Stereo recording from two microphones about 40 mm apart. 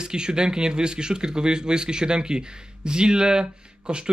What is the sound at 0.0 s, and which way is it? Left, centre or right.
Speech, centre.